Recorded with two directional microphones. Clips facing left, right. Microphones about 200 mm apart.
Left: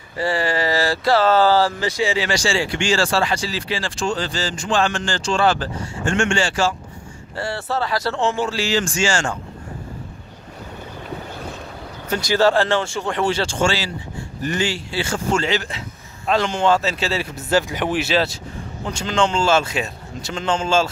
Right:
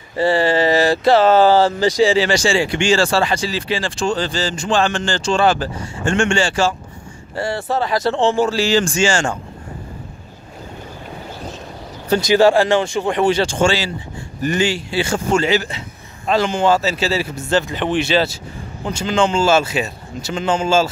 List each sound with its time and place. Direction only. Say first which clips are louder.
0.2 s speech: right 6 dB; 25° right (ahead or behind)
1.8 s speech: right 7 dB; 30° right (ahead or behind)
2.4 s speech: right 4 dB; 20° right (ahead or behind)
6.0 s speech: right 3 dB; 30° right (ahead or behind)
7.3 s speech: right 4 dB; 15° right (ahead or behind); by 9.0 s 30° right (ahead or behind)
9.0 s speech: right 4 dB; 20° right (ahead or behind)
12.2 s a man's voice: right 4 dB; 15° right (ahead or behind)
17.5 s a man's voice: right 1 dB; 10° left (ahead or behind); by 20.9 s 5° right (ahead or behind)